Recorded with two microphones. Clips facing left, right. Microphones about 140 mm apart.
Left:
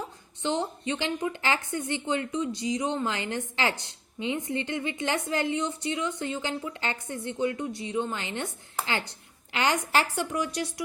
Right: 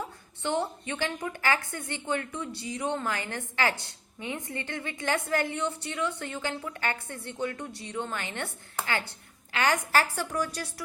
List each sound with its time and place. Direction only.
0.4 s a woman's voice: 20° left (ahead or behind)